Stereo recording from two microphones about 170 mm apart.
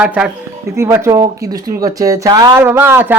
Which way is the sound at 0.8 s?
15° right (ahead or behind).